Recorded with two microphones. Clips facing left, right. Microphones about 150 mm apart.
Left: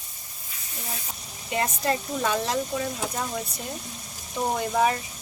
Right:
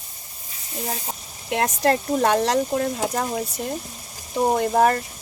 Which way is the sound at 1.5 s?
75° right (ahead or behind).